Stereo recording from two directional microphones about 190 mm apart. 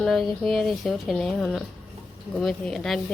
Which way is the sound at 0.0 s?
Centre (ahead or behind).